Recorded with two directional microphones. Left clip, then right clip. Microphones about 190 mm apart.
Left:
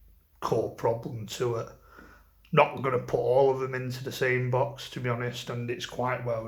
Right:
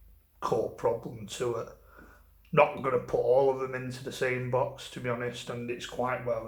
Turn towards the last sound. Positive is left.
turn(degrees=35)  # may be behind; listen again after turning